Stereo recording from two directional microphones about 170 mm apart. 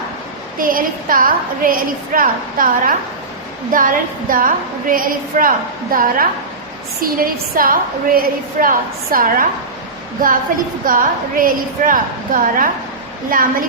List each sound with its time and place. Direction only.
0.6 s a woman's voice: 55° right (ahead or behind)
10.8 s a woman's voice: 55° right (ahead or behind)